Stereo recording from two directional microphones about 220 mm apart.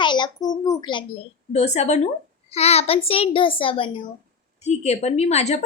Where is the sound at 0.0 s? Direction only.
20° left (ahead or behind).